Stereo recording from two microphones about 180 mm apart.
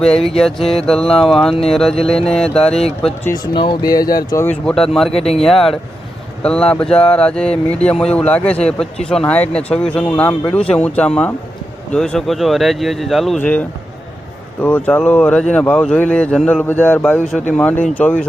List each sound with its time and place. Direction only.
0.3 s speech: centre (ahead or behind)
1.0 s speech: 30° left (ahead or behind)
1.3 s speech: centre (ahead or behind)
3.5 s speech: 25° left (ahead or behind)
4.4 s speech: 5° left (ahead or behind)
5.1 s speech: 35° left (ahead or behind)
5.4 s speech: centre (ahead or behind)
14.6 s speech: 10° left (ahead or behind)